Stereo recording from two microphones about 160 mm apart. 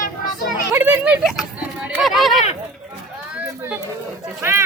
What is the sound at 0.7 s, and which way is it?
Speech, 10° right (ahead or behind).